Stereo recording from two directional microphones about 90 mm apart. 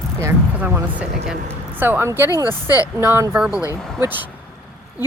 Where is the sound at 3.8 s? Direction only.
5° left (ahead or behind).